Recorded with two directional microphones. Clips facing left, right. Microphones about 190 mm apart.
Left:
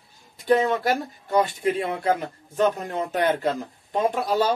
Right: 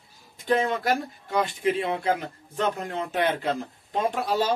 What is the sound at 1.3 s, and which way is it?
Speech, 45° left (ahead or behind).